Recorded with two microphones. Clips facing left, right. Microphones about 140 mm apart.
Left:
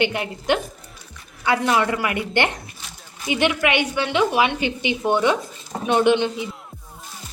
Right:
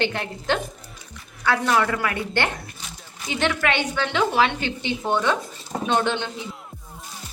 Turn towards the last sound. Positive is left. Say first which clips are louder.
# left 7 dB
turn(degrees=15)  # may be behind; listen again after turning